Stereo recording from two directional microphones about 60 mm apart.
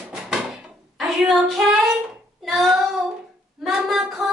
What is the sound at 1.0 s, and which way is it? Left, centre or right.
Child singing, centre.